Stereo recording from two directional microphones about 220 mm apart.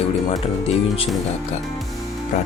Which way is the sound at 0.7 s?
25° left (ahead or behind).